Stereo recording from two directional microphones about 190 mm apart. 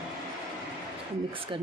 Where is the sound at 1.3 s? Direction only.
25° right (ahead or behind).